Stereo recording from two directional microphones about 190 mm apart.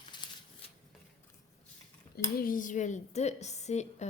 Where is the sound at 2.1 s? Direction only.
50° left (ahead or behind).